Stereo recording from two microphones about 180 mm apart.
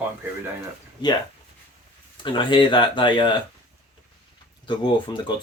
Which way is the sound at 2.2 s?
25° left (ahead or behind).